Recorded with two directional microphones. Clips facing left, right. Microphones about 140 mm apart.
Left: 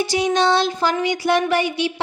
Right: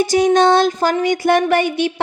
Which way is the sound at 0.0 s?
45° right (ahead or behind).